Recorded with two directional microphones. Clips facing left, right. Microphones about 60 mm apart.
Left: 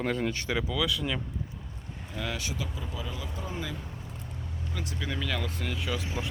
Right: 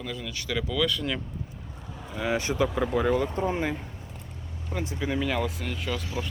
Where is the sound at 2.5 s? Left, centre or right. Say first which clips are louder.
Right 13 dB; right.